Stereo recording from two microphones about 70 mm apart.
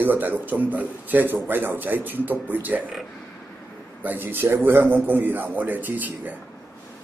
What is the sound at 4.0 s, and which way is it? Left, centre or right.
Speech, right.